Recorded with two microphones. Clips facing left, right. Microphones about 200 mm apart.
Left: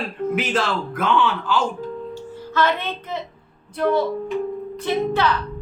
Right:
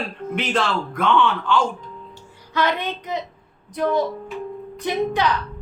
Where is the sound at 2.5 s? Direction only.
15° right (ahead or behind).